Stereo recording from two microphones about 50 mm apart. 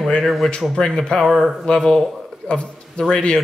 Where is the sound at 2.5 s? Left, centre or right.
Centre.